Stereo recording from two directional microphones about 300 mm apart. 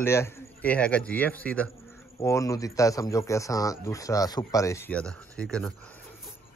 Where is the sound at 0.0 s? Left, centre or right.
Centre.